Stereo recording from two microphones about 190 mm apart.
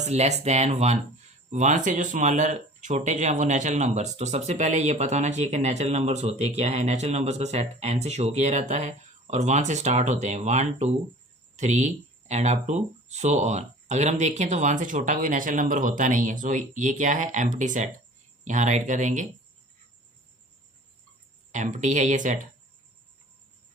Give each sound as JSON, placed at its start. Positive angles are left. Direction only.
{"t": 0.0, "sound": "speech", "side_deg": -35}
{"t": 21.5, "sound": "speech", "side_deg": -40}